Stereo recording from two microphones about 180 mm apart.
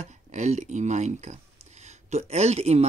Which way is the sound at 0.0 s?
40° right (ahead or behind).